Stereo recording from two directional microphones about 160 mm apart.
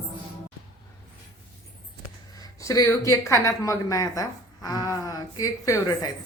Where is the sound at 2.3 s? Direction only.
20° left (ahead or behind).